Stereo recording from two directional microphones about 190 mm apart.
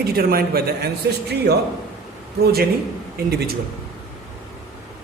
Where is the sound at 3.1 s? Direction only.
55° right (ahead or behind).